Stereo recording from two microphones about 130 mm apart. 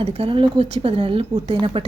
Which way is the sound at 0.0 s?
45° right (ahead or behind).